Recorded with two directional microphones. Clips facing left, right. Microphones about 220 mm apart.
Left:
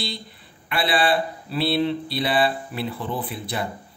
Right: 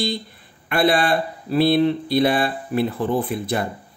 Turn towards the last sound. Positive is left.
turn(degrees=-50)  # may be behind; listen again after turning